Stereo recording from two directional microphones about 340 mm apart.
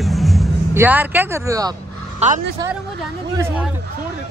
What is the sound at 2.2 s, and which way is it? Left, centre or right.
Speech, right.